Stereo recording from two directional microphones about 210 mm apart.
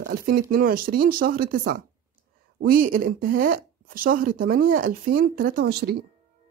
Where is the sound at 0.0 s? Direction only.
45° right (ahead or behind).